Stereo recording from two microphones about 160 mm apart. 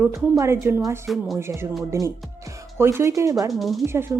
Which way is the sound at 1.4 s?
15° right (ahead or behind).